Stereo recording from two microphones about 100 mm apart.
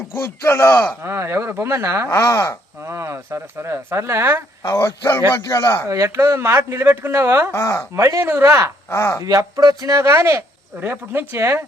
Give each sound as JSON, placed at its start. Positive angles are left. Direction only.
{"t": 0.1, "sound": "speech", "side_deg": 25}
{"t": 1.0, "sound": "speech", "side_deg": -25}
{"t": 2.0, "sound": "speech", "side_deg": 25}
{"t": 2.8, "sound": "speech", "side_deg": -30}
{"t": 4.6, "sound": "speech", "side_deg": 30}
{"t": 5.9, "sound": "speech", "side_deg": -30}
{"t": 7.5, "sound": "speech", "side_deg": 25}
{"t": 7.9, "sound": "speech", "side_deg": -30}
{"t": 8.9, "sound": "speech", "side_deg": 25}
{"t": 9.2, "sound": "speech", "side_deg": -35}